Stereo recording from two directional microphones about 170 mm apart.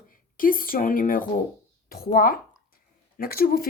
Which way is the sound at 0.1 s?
55° left (ahead or behind).